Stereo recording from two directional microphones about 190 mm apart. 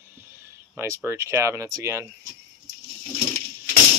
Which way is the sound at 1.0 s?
15° right (ahead or behind).